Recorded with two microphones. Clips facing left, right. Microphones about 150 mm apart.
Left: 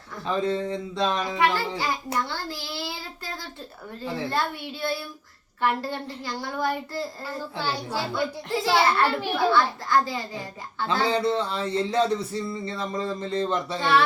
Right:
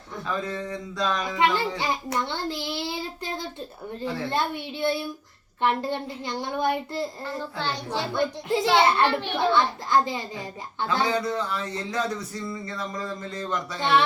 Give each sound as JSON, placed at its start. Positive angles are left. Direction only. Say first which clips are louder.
{"t": 0.3, "sound": "speech", "louder": "left 5 dB", "side_deg": 25}
{"t": 1.4, "sound": "a child's voice", "louder": "right 2 dB", "side_deg": -20}
{"t": 7.6, "sound": "a child's voice", "louder": "left 1 dB", "side_deg": 10}
{"t": 8.1, "sound": "a child's voice", "louder": "right 5 dB", "side_deg": -20}
{"t": 9.0, "sound": "a child's voice", "louder": "even", "side_deg": 5}
{"t": 9.5, "sound": "a child's voice", "louder": "right 1 dB", "side_deg": -20}
{"t": 11.0, "sound": "speech", "louder": "left 4 dB", "side_deg": 30}